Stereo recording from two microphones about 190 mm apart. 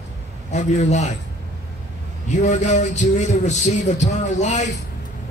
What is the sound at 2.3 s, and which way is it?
A man's voice, 40° left (ahead or behind).